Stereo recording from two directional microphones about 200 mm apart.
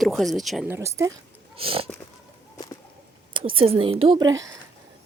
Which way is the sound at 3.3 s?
25° right (ahead or behind).